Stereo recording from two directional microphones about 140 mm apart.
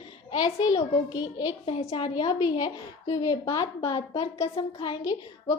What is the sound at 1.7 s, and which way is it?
A woman's voice, 45° left (ahead or behind).